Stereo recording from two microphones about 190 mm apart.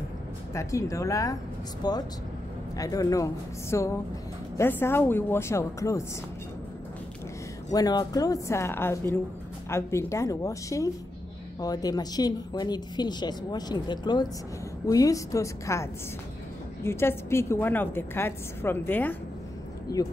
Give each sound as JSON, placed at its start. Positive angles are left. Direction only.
{"t": 0.6, "sound": "a woman's voice", "side_deg": 15}
{"t": 7.7, "sound": "a woman's voice", "side_deg": 20}